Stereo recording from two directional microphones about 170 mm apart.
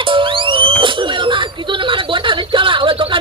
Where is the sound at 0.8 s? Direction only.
30° right (ahead or behind).